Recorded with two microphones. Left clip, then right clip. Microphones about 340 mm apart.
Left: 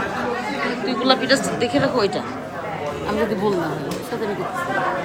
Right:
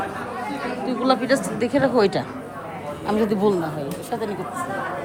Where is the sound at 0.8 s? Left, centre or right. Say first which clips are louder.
Left 2 dB; centre.